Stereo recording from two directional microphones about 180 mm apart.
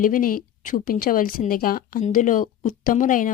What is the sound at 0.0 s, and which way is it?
Speech, 50° left (ahead or behind).